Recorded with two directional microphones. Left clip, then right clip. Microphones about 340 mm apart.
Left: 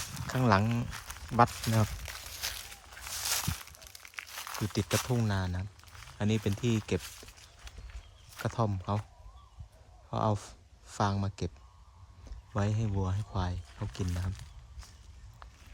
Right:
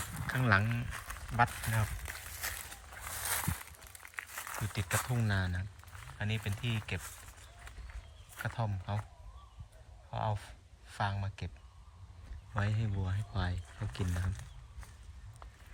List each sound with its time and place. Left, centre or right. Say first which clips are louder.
0.0 s a sound: left 2 dB; centre
0.3 s speech: left 3 dB; centre
1.4 s speech: left 5 dB; centre
1.7 s a sound: left 4 dB; centre
3.0 s a sound: left 4 dB; centre
4.9 s speech: left 1 dB; centre
8.4 s speech: left 7 dB; centre
10.1 s speech: left 6 dB; centre
12.5 s speech: left 4 dB; centre